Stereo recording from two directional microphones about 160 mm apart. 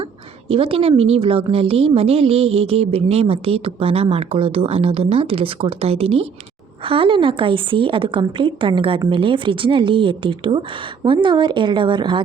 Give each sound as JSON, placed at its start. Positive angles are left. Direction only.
{"t": 0.4, "sound": "a woman's voice", "side_deg": -35}